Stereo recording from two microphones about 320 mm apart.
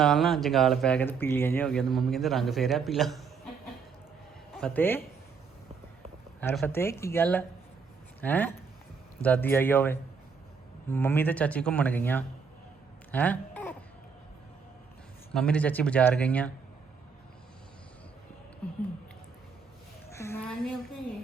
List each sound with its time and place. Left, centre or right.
0.0 s speech: centre
4.5 s speech: centre
6.4 s speech: centre
13.1 s a sound: centre
15.3 s speech: centre
20.1 s a sound: centre